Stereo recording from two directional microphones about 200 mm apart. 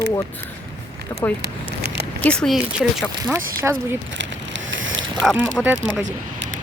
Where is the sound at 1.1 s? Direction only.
20° left (ahead or behind).